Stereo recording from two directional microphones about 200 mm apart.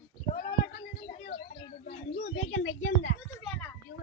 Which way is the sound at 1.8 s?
55° left (ahead or behind).